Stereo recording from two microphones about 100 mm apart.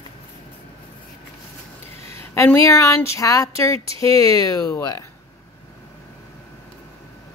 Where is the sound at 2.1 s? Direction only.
25° left (ahead or behind).